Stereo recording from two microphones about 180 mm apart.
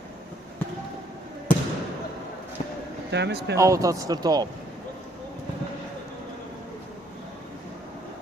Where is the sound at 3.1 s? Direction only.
70° right (ahead or behind).